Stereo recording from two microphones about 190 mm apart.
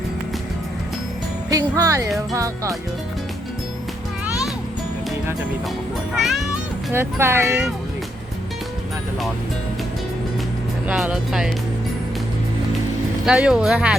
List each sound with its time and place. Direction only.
1.5 s speech: 20° right (ahead or behind)
6.1 s speech: centre (ahead or behind)
6.9 s speech: 10° right (ahead or behind)
10.8 s speech: 5° right (ahead or behind)
13.2 s speech: 5° right (ahead or behind)